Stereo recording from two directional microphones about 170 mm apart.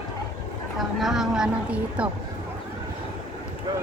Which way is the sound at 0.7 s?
Centre (ahead or behind).